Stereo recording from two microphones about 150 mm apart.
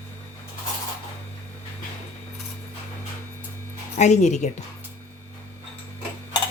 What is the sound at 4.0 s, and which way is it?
Speech, 50° left (ahead or behind).